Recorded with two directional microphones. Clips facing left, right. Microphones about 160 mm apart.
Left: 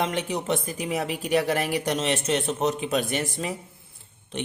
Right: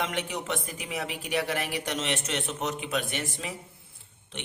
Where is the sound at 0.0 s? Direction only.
35° left (ahead or behind).